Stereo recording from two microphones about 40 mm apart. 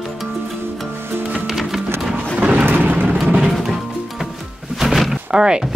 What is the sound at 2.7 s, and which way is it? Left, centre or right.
Vehicle, right.